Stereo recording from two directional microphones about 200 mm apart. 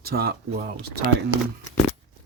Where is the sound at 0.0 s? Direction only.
50° right (ahead or behind).